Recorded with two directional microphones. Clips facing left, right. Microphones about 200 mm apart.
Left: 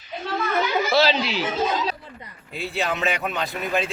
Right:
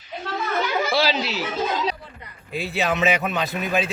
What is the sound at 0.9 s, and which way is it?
Speech, 5° right (ahead or behind).